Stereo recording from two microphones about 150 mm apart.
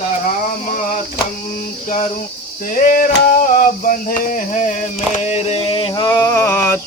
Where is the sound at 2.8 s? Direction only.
65° left (ahead or behind).